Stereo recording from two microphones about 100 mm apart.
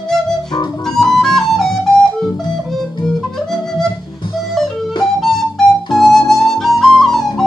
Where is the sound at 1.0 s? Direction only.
5° left (ahead or behind).